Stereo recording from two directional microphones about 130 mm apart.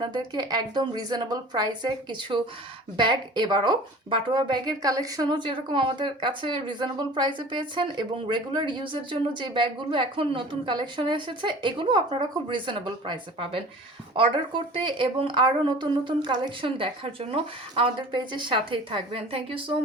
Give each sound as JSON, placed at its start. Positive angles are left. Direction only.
{"t": 0.0, "sound": "speech", "side_deg": -35}